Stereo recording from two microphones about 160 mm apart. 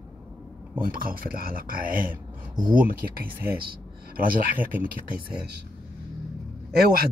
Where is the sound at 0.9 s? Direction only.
65° right (ahead or behind).